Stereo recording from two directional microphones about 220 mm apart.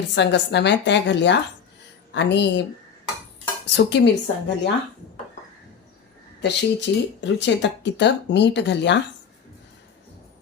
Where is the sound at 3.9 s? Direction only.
50° left (ahead or behind).